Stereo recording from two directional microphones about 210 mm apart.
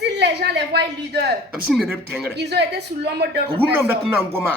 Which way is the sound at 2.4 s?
55° right (ahead or behind).